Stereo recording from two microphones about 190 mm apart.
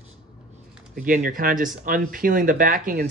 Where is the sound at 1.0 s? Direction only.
45° right (ahead or behind).